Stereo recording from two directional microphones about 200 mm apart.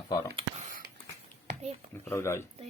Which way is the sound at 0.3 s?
35° right (ahead or behind).